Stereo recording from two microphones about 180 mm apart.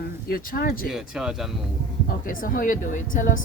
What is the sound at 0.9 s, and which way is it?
Speech, 5° right (ahead or behind).